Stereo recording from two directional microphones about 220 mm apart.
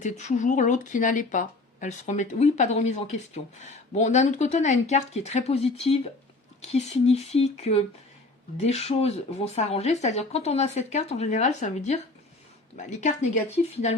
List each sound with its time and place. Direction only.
0.0 s speech: 35° left (ahead or behind)